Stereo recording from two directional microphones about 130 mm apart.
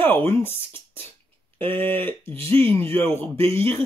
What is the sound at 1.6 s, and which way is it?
Speech, 40° right (ahead or behind).